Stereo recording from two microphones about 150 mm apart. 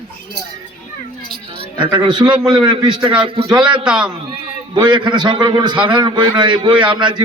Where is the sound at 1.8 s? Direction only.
35° right (ahead or behind).